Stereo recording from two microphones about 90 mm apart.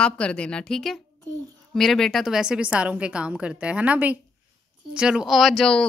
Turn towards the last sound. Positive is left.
turn(degrees=10)  # may be behind; listen again after turning